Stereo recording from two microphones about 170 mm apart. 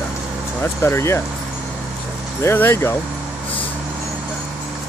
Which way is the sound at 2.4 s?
15° left (ahead or behind).